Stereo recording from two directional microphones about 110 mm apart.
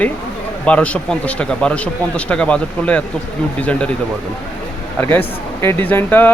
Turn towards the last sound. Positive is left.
turn(degrees=15)  # may be behind; listen again after turning